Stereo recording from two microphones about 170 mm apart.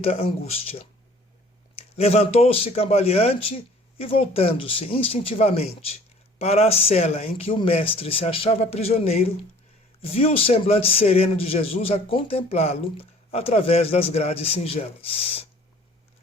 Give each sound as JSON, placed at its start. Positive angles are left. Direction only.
{"t": 0.0, "sound": "speech", "side_deg": 35}
{"t": 2.0, "sound": "speech", "side_deg": 35}